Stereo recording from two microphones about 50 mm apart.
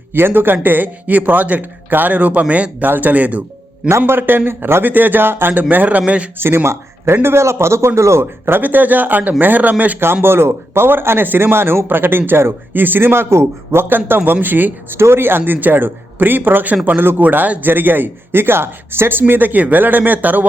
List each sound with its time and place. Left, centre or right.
0.1 s a man's voice: right
3.8 s a man's voice: right
4.2 s a man's voice: right
5.6 s a man's voice: right
6.4 s a man's voice: right
8.4 s a man's voice: right
10.2 s speech: right
14.4 s a man's voice: right
14.9 s a man's voice: right
19.3 s a man's voice: right